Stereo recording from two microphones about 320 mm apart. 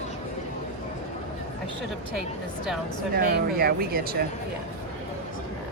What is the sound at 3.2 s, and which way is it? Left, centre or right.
Speech, right.